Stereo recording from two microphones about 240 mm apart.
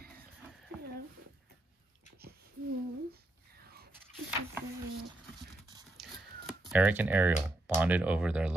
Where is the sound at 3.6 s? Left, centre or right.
Right.